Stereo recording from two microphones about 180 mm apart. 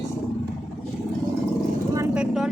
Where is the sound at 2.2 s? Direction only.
5° right (ahead or behind).